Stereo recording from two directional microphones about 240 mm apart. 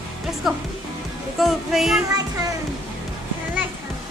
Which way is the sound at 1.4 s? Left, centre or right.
Centre.